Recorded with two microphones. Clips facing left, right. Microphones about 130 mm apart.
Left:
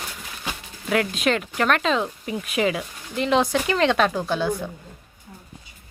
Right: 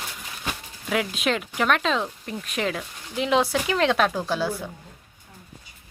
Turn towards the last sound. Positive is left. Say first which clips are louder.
# left 2 dB
turn(degrees=-5)  # may be behind; listen again after turning